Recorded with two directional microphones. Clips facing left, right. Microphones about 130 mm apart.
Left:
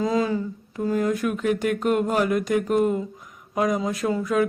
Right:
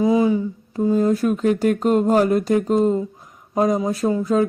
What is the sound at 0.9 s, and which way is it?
Speech, 30° right (ahead or behind).